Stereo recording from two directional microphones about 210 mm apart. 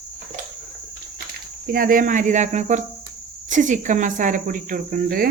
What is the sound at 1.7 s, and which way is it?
Speech, 45° right (ahead or behind).